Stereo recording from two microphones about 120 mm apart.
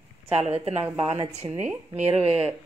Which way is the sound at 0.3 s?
60° right (ahead or behind).